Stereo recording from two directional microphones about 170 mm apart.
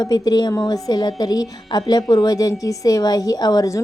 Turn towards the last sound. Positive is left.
turn(degrees=20)  # may be behind; listen again after turning